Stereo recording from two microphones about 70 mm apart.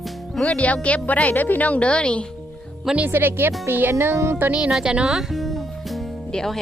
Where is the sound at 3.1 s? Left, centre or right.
Right.